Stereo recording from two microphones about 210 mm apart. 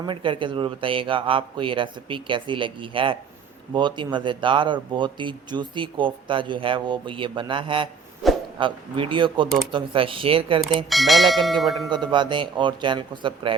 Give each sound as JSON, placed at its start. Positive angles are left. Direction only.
{"t": 0.0, "sound": "speech", "side_deg": -25}
{"t": 8.2, "sound": "a sound", "side_deg": 0}
{"t": 8.5, "sound": "speech", "side_deg": -25}
{"t": 10.8, "sound": "speech", "side_deg": 0}
{"t": 11.9, "sound": "speech", "side_deg": -20}